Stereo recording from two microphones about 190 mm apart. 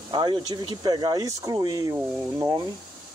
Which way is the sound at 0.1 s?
25° right (ahead or behind).